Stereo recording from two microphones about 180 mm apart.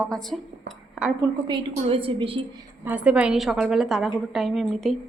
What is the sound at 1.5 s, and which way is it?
Speech, 30° right (ahead or behind).